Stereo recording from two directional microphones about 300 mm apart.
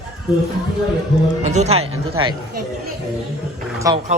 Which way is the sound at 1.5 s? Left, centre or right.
Right.